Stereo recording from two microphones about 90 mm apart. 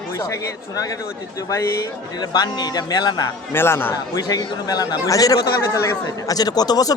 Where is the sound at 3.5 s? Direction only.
25° left (ahead or behind).